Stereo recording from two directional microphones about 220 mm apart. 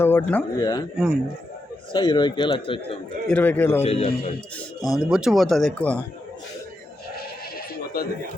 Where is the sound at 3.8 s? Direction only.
30° left (ahead or behind).